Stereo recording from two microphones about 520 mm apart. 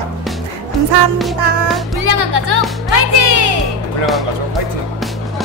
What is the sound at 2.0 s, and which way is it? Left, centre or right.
Speech, right.